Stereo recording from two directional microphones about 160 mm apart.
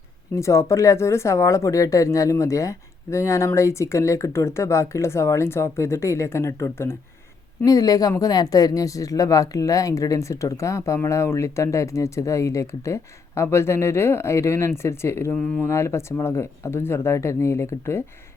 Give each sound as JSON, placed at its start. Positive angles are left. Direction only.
{"t": 0.3, "sound": "a woman's voice", "side_deg": 20}